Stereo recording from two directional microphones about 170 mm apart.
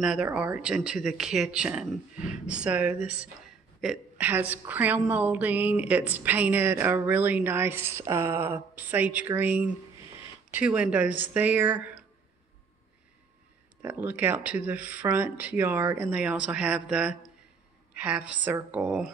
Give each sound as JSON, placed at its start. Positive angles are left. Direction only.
{"t": 0.0, "sound": "a woman's voice", "side_deg": -5}
{"t": 13.8, "sound": "a woman's voice", "side_deg": -10}